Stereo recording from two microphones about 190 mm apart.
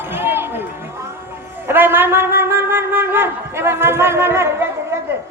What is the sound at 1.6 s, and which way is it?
Wind instrument, 10° right (ahead or behind).